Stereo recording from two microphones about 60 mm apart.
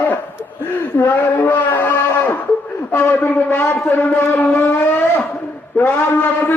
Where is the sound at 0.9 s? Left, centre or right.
Left.